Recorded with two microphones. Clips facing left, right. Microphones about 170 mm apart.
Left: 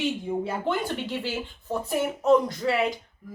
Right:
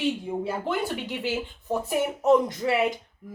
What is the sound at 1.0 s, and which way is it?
Speech, 20° right (ahead or behind).